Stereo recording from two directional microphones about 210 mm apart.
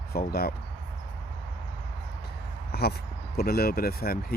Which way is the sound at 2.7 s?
50° left (ahead or behind).